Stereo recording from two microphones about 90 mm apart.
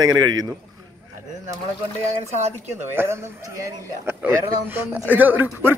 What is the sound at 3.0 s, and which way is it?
A man's voice, 25° right (ahead or behind).